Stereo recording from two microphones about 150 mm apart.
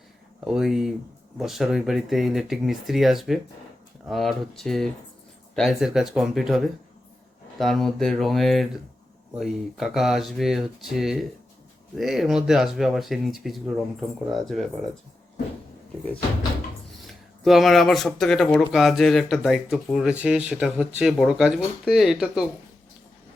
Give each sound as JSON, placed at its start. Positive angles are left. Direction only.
{"t": 0.4, "sound": "speech", "side_deg": -5}
{"t": 17.4, "sound": "speech", "side_deg": 0}